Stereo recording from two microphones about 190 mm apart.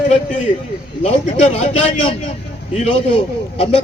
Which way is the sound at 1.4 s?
35° left (ahead or behind).